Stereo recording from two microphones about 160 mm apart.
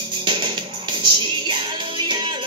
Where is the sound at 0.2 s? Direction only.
30° right (ahead or behind).